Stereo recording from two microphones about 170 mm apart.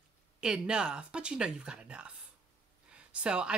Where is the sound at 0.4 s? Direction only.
5° right (ahead or behind).